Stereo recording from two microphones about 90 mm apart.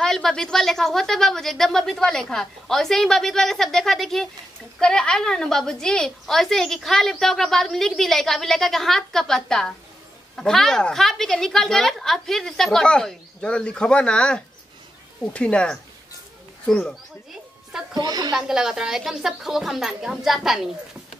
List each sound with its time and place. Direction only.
0.0 s a woman's voice: 5° left (ahead or behind)
17.9 s a woman's voice: 50° right (ahead or behind)
18.3 s a woman's voice: 5° right (ahead or behind)